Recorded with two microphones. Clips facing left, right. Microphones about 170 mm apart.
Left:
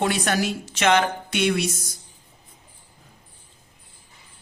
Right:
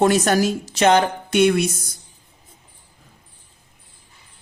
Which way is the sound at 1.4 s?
50° right (ahead or behind).